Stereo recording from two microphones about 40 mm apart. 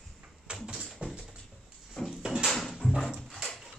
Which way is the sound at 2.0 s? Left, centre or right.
Centre.